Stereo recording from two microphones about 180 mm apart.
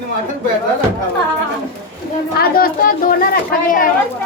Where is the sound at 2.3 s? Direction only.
55° left (ahead or behind).